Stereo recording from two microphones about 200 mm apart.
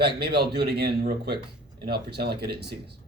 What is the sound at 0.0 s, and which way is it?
Speech, 55° right (ahead or behind).